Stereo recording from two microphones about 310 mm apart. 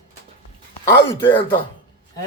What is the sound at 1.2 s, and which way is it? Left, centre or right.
Speech, centre.